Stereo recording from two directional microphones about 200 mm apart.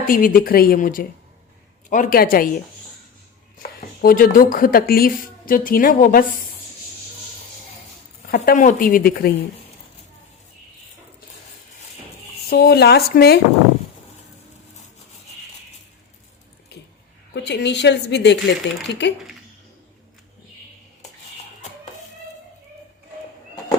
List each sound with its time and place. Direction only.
0.1 s speech: 45° left (ahead or behind)
3.6 s speech: 45° left (ahead or behind)
8.3 s speech: 45° left (ahead or behind)
12.5 s speech: 50° left (ahead or behind)
17.3 s a woman's voice: 60° left (ahead or behind)